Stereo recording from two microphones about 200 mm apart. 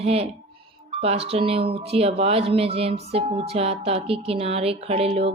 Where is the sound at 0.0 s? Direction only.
30° right (ahead or behind).